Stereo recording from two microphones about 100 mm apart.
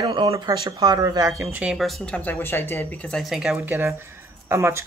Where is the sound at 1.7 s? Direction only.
Centre (ahead or behind); by 2.9 s 20° left (ahead or behind).